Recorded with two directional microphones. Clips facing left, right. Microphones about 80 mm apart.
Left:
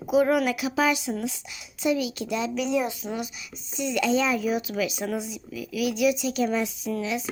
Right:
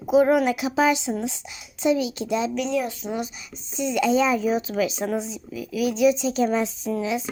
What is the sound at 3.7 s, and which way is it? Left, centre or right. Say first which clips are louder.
A child's voice: right 3 dB; right.